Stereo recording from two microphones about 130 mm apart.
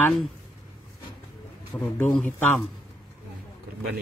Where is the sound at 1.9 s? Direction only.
10° left (ahead or behind).